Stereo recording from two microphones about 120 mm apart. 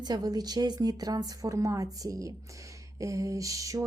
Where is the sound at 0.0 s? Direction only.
35° right (ahead or behind).